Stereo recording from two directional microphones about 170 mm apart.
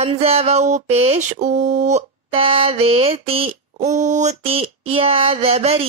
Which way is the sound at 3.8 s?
45° right (ahead or behind).